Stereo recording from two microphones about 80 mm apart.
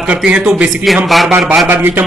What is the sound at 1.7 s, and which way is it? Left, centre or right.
Speech, right.